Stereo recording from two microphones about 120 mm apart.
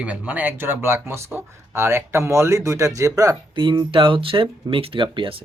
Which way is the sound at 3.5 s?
40° right (ahead or behind).